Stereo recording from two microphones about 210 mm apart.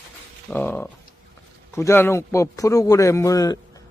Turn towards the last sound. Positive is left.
turn(degrees=15)  # may be behind; listen again after turning